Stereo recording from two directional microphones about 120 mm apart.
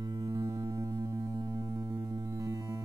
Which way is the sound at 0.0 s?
30° right (ahead or behind).